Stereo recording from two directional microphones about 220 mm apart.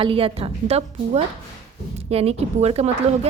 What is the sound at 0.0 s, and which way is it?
Speech, 25° right (ahead or behind).